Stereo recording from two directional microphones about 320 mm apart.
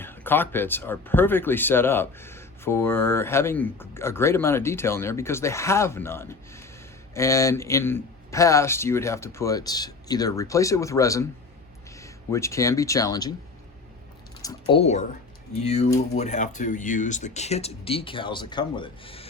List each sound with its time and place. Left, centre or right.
0.0 s speech: centre
14.4 s speech: centre